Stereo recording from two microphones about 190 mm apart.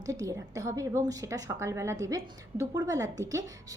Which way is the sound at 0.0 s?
20° right (ahead or behind).